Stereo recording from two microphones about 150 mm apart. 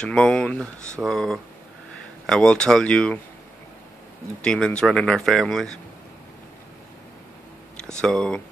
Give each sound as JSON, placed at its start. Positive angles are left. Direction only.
{"t": 0.0, "sound": "speech", "side_deg": 5}
{"t": 4.4, "sound": "speech", "side_deg": 5}
{"t": 7.7, "sound": "speech", "side_deg": 5}